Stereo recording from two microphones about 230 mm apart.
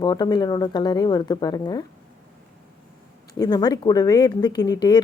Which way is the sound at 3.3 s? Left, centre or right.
Centre.